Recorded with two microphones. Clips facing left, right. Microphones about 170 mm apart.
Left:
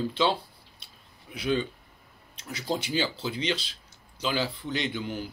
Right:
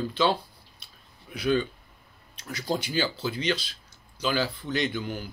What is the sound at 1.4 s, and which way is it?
Speech, 25° left (ahead or behind).